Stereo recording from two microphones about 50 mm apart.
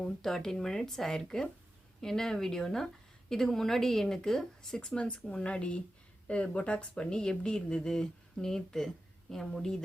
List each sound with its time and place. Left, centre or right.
0.0 s speech: centre